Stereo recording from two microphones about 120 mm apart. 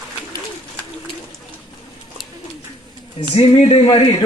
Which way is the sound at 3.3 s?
55° left (ahead or behind).